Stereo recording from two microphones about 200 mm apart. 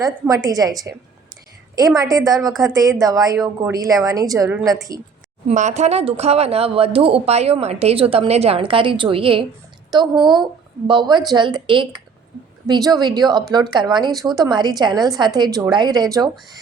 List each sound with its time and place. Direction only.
0.0 s a woman's voice: 15° right (ahead or behind)
2.0 s a woman's voice: 20° right (ahead or behind)
5.5 s a woman's voice: 35° right (ahead or behind); by 16.3 s 20° right (ahead or behind)